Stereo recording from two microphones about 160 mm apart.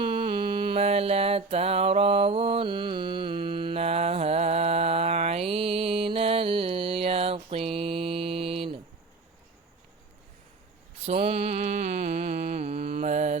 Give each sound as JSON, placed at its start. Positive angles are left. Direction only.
{"t": 0.0, "sound": "music", "side_deg": -30}
{"t": 11.0, "sound": "mantra", "side_deg": -40}